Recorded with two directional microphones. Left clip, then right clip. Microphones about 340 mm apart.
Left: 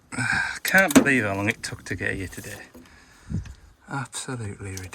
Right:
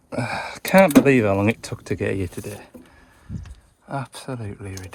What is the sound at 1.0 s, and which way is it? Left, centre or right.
Speech, centre.